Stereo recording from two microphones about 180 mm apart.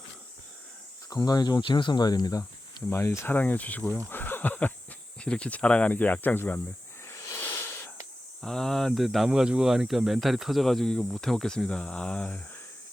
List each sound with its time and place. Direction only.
1.1 s speech: 20° left (ahead or behind)
7.1 s snake: 15° left (ahead or behind)
8.4 s speech: centre (ahead or behind)